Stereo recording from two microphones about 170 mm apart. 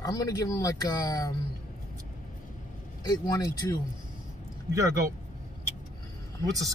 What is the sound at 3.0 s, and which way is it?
Speech, 20° left (ahead or behind).